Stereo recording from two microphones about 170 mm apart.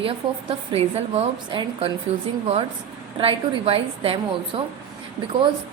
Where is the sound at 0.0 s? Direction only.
30° right (ahead or behind).